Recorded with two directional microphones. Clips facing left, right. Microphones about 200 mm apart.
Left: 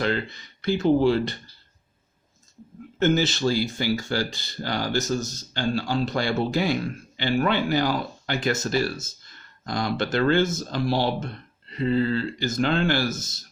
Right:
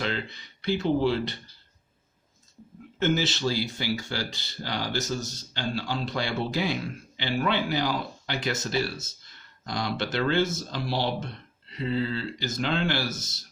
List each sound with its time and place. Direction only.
0.0 s speech: 50° left (ahead or behind)
3.0 s speech: 45° left (ahead or behind)